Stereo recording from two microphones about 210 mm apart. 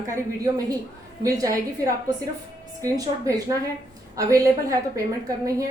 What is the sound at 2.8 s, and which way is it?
A woman's voice, 15° right (ahead or behind).